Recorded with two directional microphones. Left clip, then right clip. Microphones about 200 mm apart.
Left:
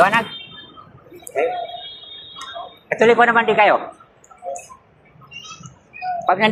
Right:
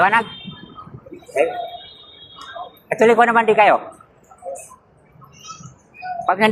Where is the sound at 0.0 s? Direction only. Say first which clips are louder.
Even; 55° right (ahead or behind).